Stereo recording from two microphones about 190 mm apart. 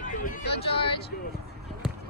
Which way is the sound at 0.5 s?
30° left (ahead or behind).